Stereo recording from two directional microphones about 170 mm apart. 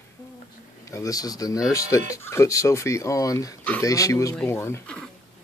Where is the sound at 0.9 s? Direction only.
20° left (ahead or behind).